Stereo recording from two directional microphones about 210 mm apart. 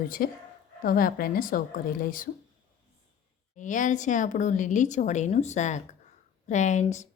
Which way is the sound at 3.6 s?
35° left (ahead or behind).